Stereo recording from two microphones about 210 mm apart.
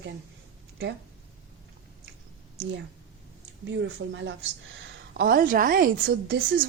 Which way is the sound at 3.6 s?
60° right (ahead or behind).